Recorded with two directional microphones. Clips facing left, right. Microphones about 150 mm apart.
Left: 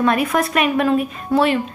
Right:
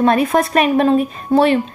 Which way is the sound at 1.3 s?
20° right (ahead or behind).